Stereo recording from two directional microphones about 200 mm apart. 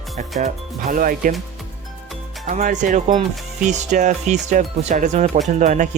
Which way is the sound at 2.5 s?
40° right (ahead or behind).